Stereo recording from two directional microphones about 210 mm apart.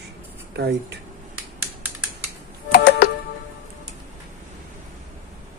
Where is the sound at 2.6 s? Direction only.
50° left (ahead or behind).